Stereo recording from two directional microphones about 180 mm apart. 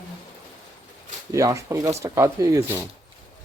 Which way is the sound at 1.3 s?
15° right (ahead or behind).